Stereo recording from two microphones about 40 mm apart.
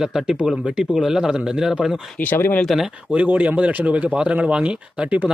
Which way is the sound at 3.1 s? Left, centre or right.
Right.